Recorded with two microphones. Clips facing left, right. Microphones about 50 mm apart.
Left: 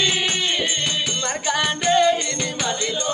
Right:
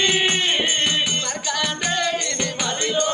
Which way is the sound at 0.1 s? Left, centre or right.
Right.